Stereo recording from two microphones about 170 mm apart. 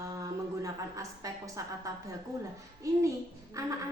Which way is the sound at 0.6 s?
20° right (ahead or behind).